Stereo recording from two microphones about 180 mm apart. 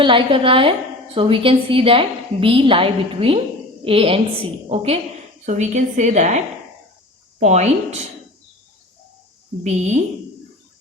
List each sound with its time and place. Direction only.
0.0 s a woman's voice: 30° right (ahead or behind)
9.6 s a woman's voice: 40° right (ahead or behind)